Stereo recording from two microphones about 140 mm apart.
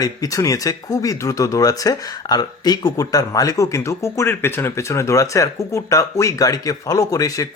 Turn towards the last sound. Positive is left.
turn(degrees=25)  # may be behind; listen again after turning